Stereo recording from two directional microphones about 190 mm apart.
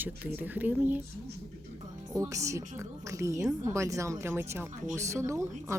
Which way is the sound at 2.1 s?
15° right (ahead or behind).